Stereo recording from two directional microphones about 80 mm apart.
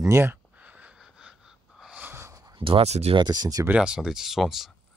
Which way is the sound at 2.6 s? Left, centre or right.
Right.